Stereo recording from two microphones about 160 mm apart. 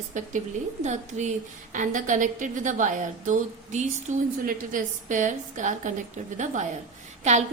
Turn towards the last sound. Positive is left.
turn(degrees=-45)  # may be behind; listen again after turning